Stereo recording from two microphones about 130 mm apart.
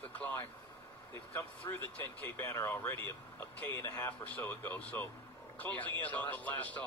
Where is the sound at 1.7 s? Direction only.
25° left (ahead or behind).